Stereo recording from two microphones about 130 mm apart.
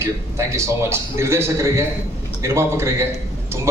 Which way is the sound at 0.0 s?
20° right (ahead or behind).